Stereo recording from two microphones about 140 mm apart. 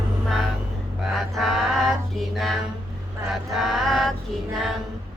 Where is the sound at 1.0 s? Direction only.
Centre (ahead or behind).